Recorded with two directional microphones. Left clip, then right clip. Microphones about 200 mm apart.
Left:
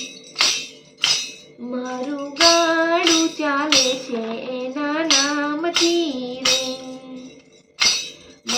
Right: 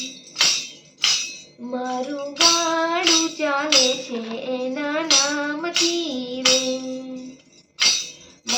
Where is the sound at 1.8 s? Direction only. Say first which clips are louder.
Right 2 dB; 15° left (ahead or behind).